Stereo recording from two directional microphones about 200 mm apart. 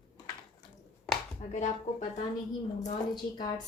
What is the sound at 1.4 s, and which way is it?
Speech, 35° left (ahead or behind).